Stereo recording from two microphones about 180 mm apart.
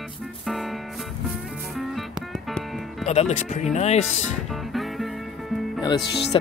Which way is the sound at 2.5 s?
5° left (ahead or behind).